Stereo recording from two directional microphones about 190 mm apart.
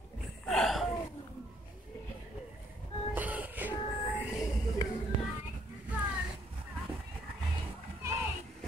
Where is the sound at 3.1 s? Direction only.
10° right (ahead or behind).